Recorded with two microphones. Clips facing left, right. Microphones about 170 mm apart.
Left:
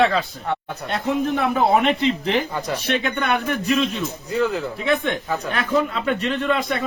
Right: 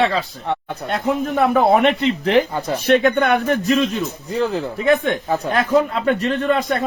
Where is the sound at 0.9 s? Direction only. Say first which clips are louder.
Right 1 dB; 50° right (ahead or behind).